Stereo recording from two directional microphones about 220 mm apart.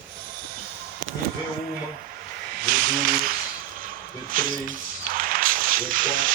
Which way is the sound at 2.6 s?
40° right (ahead or behind).